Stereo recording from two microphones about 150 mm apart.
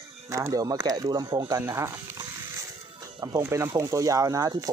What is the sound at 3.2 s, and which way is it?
Speech, 20° right (ahead or behind).